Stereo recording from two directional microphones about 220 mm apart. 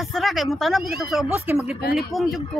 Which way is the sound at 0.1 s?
Centre (ahead or behind).